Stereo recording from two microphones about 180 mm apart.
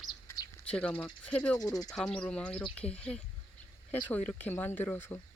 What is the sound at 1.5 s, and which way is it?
Speech, 20° left (ahead or behind).